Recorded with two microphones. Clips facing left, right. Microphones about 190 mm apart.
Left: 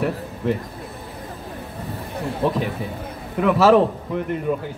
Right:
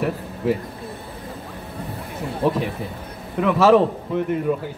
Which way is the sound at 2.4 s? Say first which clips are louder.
Right 1 dB; centre (ahead or behind).